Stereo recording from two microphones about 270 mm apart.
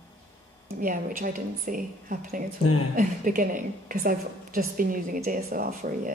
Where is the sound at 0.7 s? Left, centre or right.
Right.